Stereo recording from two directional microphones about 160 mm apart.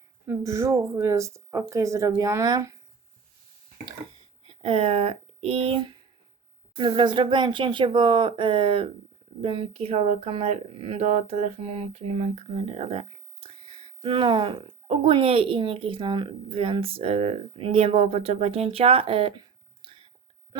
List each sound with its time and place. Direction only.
0.3 s speech: 20° right (ahead or behind)
4.4 s speech: 40° right (ahead or behind)
6.7 s speech: 30° right (ahead or behind)
19.8 s whispering: 35° right (ahead or behind)